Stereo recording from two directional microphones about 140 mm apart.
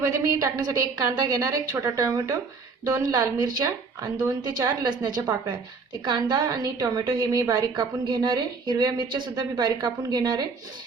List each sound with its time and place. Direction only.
0.0 s a woman's voice: 20° right (ahead or behind)